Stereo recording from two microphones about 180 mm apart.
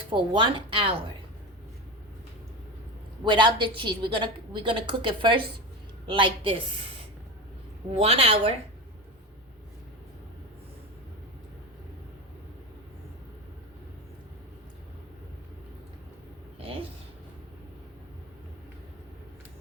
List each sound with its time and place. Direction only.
0.1 s a woman's voice: 25° right (ahead or behind)
3.2 s a woman's voice: 25° right (ahead or behind)
7.9 s a woman's voice: 30° right (ahead or behind)
16.6 s a sound: 30° right (ahead or behind)